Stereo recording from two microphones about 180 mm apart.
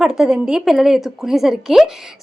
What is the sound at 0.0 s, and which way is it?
A woman's voice, 5° right (ahead or behind).